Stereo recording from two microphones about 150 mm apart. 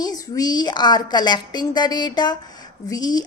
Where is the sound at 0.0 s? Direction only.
25° left (ahead or behind).